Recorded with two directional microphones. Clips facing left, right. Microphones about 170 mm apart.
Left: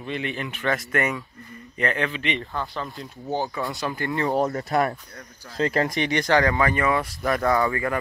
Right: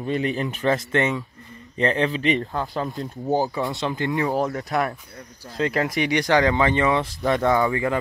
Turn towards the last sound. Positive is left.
turn(degrees=-20)  # may be behind; listen again after turning